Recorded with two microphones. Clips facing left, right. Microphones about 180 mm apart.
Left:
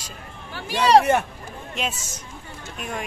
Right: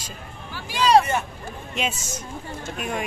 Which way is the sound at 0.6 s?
65° left (ahead or behind).